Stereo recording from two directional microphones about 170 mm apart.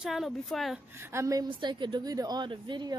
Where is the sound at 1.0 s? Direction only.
15° right (ahead or behind).